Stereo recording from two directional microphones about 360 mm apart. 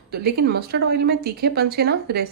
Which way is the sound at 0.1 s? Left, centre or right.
Right.